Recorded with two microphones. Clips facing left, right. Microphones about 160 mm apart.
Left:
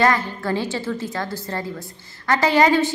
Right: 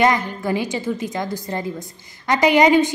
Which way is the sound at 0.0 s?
15° right (ahead or behind).